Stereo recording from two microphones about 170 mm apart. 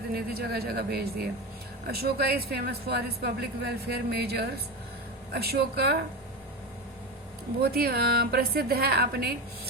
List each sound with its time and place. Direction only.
0.1 s a woman's voice: 65° right (ahead or behind)
7.6 s a woman's voice: 65° right (ahead or behind)